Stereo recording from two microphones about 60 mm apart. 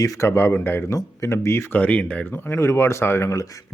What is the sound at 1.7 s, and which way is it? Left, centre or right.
Speech, left.